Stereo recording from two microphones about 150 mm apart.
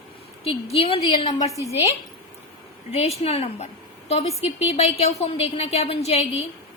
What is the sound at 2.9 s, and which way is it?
A woman's voice, 45° left (ahead or behind).